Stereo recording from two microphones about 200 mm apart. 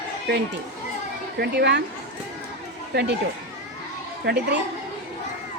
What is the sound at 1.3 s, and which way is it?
Speech, 55° right (ahead or behind).